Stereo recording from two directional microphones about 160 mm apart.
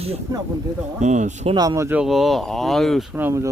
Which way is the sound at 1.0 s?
50° right (ahead or behind).